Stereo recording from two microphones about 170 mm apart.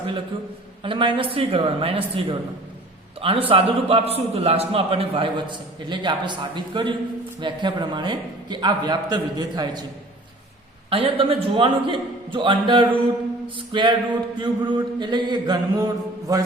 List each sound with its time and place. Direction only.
0.8 s a man's voice: 30° right (ahead or behind)
10.8 s a man's voice: 30° right (ahead or behind)